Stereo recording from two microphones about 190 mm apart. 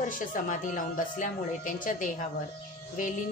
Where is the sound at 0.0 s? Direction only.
45° left (ahead or behind).